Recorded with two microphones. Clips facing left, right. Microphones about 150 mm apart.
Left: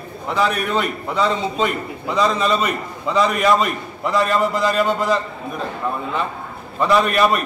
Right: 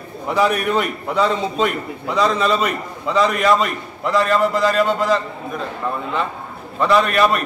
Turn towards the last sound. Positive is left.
turn(degrees=5)  # may be behind; listen again after turning